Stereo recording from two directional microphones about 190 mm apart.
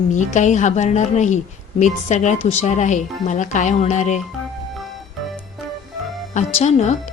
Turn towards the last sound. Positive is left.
turn(degrees=35)  # may be behind; listen again after turning